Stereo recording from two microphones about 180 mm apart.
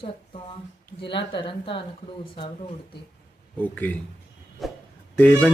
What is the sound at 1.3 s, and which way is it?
Speech, 30° left (ahead or behind).